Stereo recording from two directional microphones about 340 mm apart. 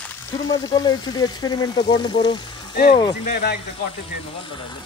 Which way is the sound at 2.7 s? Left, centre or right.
Left.